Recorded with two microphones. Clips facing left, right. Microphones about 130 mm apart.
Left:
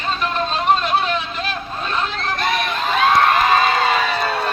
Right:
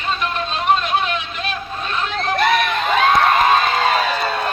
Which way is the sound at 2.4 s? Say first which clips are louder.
Right 5 dB; 55° right (ahead or behind).